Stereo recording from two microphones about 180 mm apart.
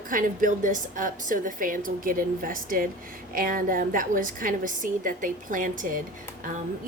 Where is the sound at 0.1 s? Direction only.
45° right (ahead or behind).